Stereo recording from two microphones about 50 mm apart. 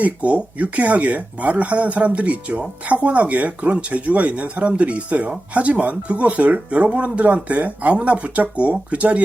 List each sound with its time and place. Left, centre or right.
0.0 s speech: right